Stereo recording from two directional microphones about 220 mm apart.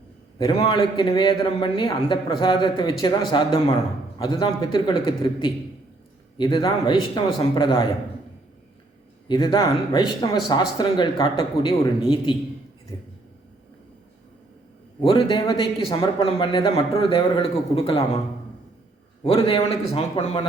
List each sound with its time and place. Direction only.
0.3 s a man's voice: 25° left (ahead or behind)
9.3 s a man's voice: 20° left (ahead or behind)
15.0 s a man's voice: 25° left (ahead or behind)
19.2 s a man's voice: 25° left (ahead or behind)